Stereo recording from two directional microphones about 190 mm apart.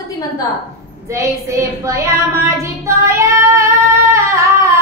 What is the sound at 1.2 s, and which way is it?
Child singing, 15° right (ahead or behind).